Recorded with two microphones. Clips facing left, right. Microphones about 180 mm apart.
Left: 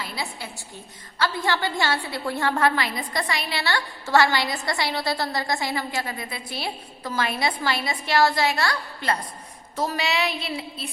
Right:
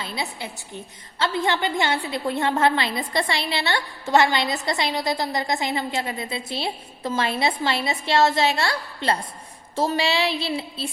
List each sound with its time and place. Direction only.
0.0 s a woman's voice: 20° right (ahead or behind)